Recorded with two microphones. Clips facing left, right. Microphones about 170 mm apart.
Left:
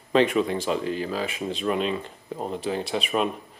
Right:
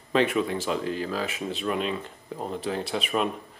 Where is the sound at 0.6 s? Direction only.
5° left (ahead or behind).